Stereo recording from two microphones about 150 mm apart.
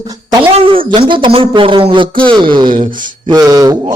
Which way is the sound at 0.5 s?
35° right (ahead or behind).